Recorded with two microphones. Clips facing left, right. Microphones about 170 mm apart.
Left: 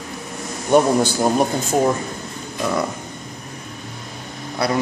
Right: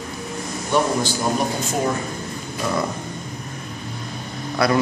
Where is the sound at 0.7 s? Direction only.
50° left (ahead or behind).